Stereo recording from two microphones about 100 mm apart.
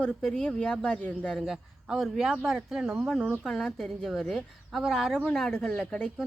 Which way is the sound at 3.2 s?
5° left (ahead or behind).